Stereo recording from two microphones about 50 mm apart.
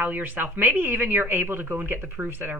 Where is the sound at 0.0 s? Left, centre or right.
Right.